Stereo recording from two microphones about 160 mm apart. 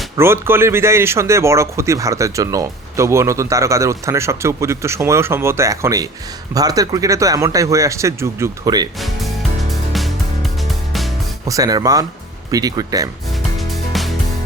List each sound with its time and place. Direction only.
0.2 s a man's voice: 15° right (ahead or behind)
9.0 s music: centre (ahead or behind)
11.4 s speech: 20° right (ahead or behind)
13.6 s music: centre (ahead or behind)